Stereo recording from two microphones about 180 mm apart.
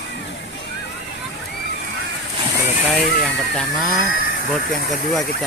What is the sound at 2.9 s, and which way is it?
Speech, 5° left (ahead or behind).